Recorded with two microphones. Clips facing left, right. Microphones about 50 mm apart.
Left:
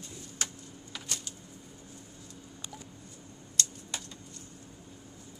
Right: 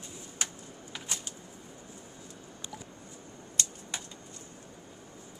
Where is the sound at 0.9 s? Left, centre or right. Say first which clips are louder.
Right 1 dB; centre.